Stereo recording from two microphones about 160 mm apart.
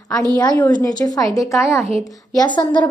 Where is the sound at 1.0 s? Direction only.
20° left (ahead or behind).